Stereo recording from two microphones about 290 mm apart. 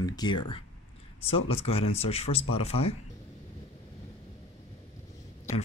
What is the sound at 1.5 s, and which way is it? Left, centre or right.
Speech, centre.